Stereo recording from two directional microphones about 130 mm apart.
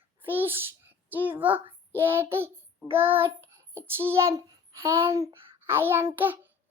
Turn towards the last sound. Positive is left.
turn(degrees=-15)  # may be behind; listen again after turning